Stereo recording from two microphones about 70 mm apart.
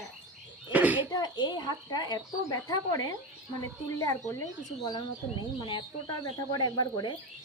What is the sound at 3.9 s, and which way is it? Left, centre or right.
Speech, left.